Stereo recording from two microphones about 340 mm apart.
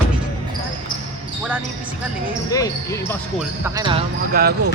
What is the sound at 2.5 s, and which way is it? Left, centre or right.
Speech, centre.